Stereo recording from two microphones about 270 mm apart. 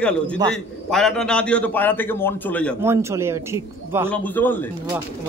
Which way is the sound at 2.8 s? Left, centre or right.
Centre.